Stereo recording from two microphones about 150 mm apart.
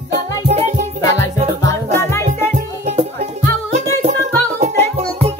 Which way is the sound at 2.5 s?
50° right (ahead or behind).